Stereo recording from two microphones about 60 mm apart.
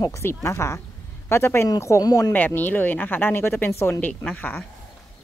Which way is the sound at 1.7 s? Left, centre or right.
Left.